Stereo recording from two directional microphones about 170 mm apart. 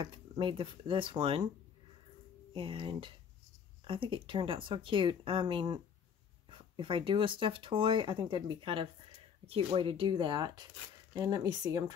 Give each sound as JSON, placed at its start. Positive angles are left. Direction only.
{"t": 0.0, "sound": "speech", "side_deg": -30}
{"t": 2.5, "sound": "speech", "side_deg": -30}
{"t": 6.8, "sound": "speech", "side_deg": -30}